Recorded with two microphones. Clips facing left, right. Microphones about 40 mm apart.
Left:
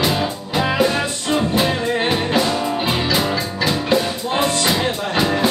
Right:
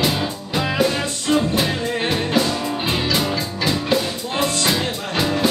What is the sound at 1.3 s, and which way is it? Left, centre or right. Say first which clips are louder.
Music: left 1 dB; centre.